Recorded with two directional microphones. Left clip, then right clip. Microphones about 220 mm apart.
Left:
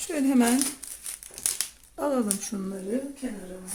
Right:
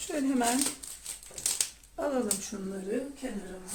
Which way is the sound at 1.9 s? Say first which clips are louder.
Left 5 dB; 45° left (ahead or behind).